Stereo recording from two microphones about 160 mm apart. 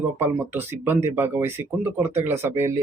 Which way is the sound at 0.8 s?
15° right (ahead or behind).